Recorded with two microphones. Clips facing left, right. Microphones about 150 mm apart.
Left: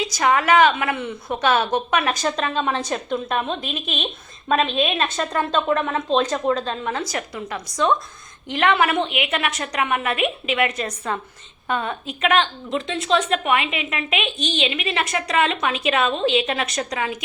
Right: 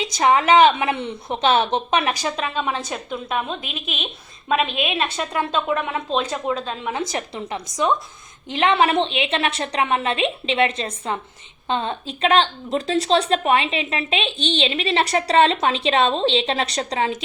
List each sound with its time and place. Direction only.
0.0 s a woman's voice: 20° right (ahead or behind)
2.3 s a woman's voice: 5° right (ahead or behind)
4.4 s a woman's voice: 10° right (ahead or behind)
7.1 s a woman's voice: 25° right (ahead or behind)
7.8 s a woman's voice: 15° right (ahead or behind); by 17.2 s 30° right (ahead or behind)